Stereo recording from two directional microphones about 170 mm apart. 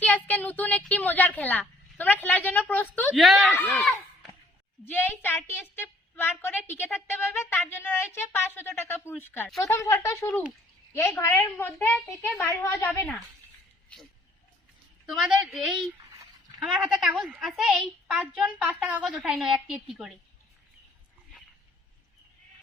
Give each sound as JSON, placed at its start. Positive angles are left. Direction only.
{"t": 0.0, "sound": "a woman's voice", "side_deg": 10}
{"t": 3.2, "sound": "a woman's voice", "side_deg": 0}
{"t": 13.9, "sound": "a woman's voice", "side_deg": 5}